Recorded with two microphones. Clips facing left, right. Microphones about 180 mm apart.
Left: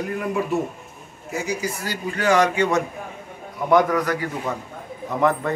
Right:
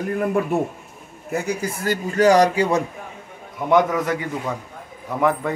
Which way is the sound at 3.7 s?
25° right (ahead or behind).